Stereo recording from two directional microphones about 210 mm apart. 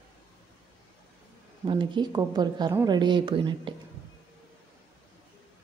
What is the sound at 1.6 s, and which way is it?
A woman's voice, 20° right (ahead or behind).